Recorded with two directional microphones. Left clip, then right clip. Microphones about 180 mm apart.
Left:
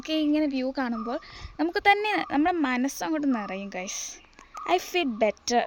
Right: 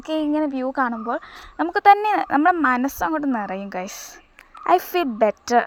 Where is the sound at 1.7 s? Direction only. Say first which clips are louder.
Right 8 dB; 15° right (ahead or behind).